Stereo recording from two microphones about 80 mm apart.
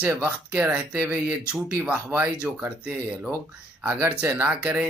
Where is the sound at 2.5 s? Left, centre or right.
Centre.